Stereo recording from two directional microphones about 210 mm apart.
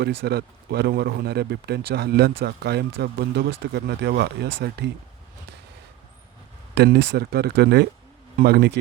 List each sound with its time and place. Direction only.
0.0 s speech: 50° right (ahead or behind)
6.7 s speech: 50° right (ahead or behind)